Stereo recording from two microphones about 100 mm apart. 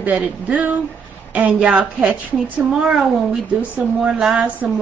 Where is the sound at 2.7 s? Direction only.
5° right (ahead or behind).